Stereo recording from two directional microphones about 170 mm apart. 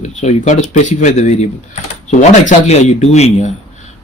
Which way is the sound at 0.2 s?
45° left (ahead or behind).